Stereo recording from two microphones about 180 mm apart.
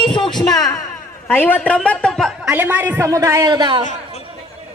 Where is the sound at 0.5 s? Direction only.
20° left (ahead or behind).